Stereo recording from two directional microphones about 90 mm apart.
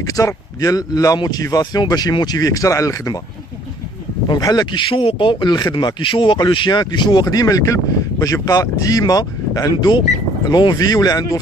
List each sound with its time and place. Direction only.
0.0 s speech: 40° left (ahead or behind)
4.3 s speech: 50° left (ahead or behind)
4.8 s speech: 75° left (ahead or behind); by 7.2 s 55° left (ahead or behind)
7.2 s speech: 40° left (ahead or behind)